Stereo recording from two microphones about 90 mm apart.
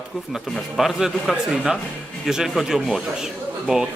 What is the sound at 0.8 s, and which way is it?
Speech, 5° right (ahead or behind).